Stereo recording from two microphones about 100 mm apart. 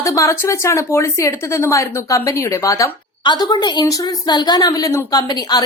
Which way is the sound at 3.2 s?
50° left (ahead or behind).